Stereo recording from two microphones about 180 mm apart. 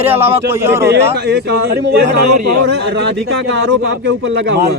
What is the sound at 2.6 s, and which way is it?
Speech, 80° right.